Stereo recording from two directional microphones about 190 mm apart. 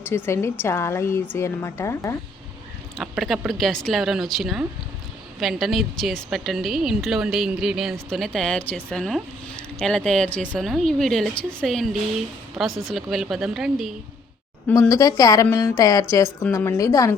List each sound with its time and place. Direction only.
0.0 s a woman's voice: 15° left (ahead or behind)
3.0 s a woman's voice: centre (ahead or behind)
14.7 s a woman's voice: 15° left (ahead or behind)